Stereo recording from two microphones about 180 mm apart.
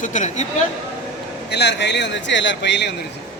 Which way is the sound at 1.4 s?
70° left (ahead or behind).